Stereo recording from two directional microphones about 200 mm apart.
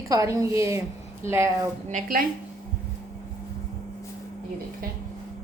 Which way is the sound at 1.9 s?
45° right (ahead or behind).